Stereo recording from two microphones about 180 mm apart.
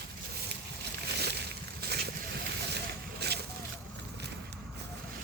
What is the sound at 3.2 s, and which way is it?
Boat, 65° right (ahead or behind).